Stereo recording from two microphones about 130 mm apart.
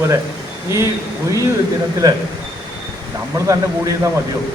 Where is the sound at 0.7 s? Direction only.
20° right (ahead or behind).